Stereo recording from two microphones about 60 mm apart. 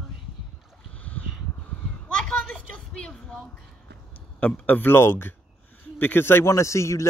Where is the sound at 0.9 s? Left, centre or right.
Left.